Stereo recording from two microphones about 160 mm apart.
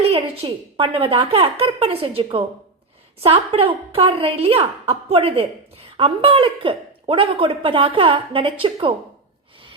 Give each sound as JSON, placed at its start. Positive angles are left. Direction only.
{"t": 0.1, "sound": "speech", "side_deg": -35}